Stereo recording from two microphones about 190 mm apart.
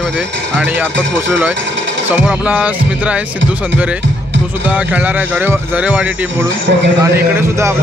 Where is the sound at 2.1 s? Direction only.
5° right (ahead or behind).